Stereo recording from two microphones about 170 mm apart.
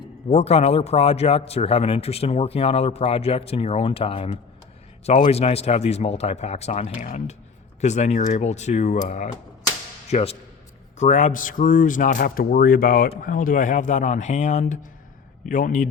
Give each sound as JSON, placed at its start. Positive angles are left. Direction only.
{"t": 0.3, "sound": "speech", "side_deg": 40}